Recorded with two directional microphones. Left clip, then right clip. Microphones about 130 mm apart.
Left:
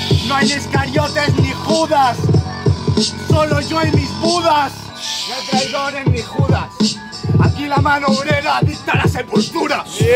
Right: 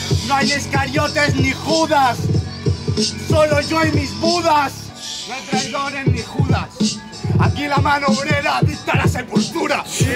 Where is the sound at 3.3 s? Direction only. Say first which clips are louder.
Right 3 dB; centre (ahead or behind).